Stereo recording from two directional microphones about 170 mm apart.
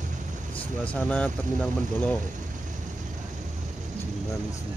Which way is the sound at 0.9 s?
10° left (ahead or behind).